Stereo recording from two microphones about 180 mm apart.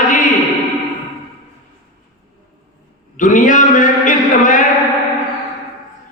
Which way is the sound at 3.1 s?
45° left (ahead or behind).